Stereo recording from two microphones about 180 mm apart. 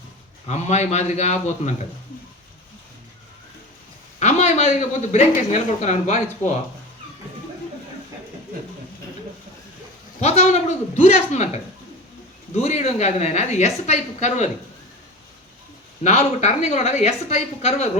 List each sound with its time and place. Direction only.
0.4 s speech: 40° left (ahead or behind)
4.2 s speech: 40° left (ahead or behind)
10.2 s speech: 35° left (ahead or behind)
16.0 s speech: 40° left (ahead or behind)